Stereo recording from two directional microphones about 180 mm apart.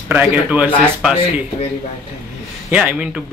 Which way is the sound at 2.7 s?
5° right (ahead or behind).